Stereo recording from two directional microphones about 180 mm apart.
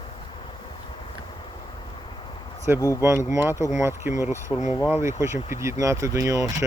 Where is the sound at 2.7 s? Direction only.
10° right (ahead or behind).